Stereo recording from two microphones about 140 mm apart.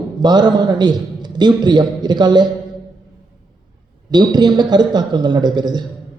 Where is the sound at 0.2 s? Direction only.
30° right (ahead or behind).